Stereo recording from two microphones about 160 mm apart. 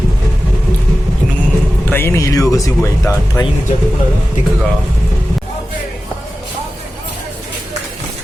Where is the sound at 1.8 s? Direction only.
15° left (ahead or behind).